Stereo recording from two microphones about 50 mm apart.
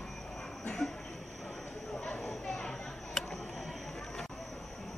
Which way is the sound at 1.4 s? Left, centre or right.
Centre.